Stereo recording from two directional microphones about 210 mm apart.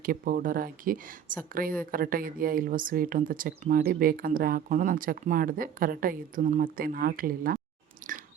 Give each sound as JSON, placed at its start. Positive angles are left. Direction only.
{"t": 0.0, "sound": "speech", "side_deg": -40}
{"t": 8.0, "sound": "chewing", "side_deg": -40}